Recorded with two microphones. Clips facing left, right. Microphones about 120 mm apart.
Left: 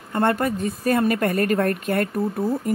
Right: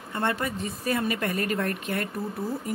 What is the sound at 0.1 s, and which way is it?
A woman's voice, 50° left (ahead or behind).